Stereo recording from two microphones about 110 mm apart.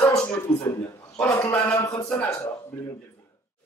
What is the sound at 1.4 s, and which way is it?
Speech, 15° left (ahead or behind).